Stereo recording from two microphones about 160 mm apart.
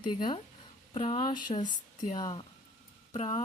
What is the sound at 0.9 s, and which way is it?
Speech, 35° left (ahead or behind).